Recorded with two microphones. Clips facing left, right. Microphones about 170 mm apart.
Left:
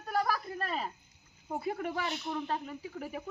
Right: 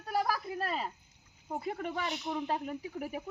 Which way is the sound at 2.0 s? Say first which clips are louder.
Right 1 dB; 15° right (ahead or behind).